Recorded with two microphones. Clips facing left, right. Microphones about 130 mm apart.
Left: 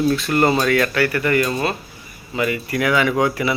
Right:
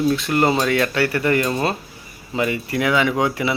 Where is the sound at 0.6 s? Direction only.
20° right (ahead or behind).